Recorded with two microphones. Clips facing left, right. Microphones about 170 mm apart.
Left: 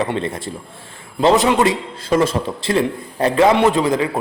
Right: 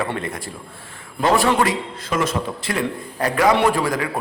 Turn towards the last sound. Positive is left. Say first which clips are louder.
# left 4 dB
turn(degrees=25)  # may be behind; listen again after turning